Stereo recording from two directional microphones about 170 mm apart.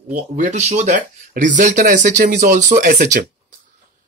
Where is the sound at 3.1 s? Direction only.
45° right (ahead or behind).